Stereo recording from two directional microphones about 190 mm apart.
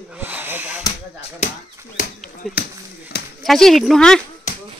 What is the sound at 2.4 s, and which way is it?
Speech, centre (ahead or behind).